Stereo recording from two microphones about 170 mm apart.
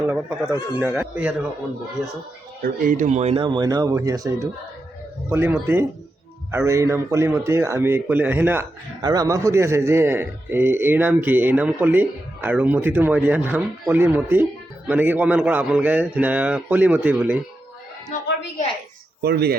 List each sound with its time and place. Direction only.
0.1 s a man's voice: 5° right (ahead or behind)
2.6 s speech: 55° right (ahead or behind)
3.4 s a man's voice: 25° right (ahead or behind)
9.0 s a man's voice: 20° right (ahead or behind)
19.2 s speech: 70° right (ahead or behind)